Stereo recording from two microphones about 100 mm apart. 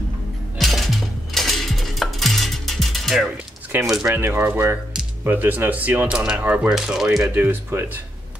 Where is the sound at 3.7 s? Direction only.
25° right (ahead or behind).